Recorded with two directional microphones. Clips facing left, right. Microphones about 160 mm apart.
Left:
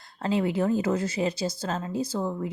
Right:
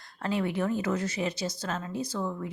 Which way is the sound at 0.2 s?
25° left (ahead or behind).